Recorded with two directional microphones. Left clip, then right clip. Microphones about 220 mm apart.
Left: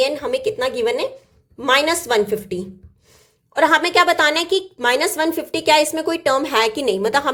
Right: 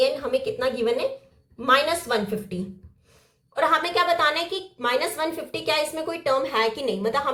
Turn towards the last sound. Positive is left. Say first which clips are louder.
# left 6 dB
turn(degrees=45)  # may be behind; listen again after turning